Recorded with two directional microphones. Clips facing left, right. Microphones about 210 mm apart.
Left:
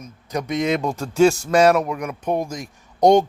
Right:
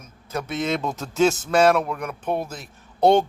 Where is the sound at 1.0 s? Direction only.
Centre (ahead or behind).